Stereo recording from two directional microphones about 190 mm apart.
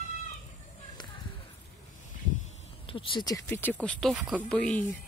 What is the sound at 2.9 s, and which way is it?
Speech, 25° left (ahead or behind).